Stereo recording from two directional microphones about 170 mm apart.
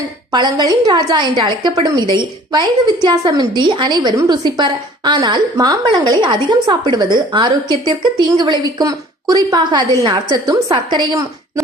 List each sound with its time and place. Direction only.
0.3 s a woman's voice: 25° right (ahead or behind)